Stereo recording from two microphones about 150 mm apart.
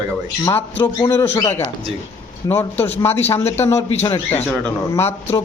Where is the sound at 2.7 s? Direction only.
45° left (ahead or behind).